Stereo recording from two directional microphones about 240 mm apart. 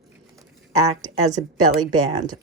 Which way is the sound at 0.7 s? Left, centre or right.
Right.